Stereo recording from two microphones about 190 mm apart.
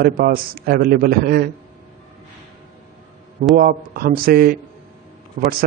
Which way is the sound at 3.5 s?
50° right (ahead or behind).